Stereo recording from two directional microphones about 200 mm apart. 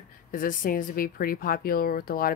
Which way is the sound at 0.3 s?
45° left (ahead or behind).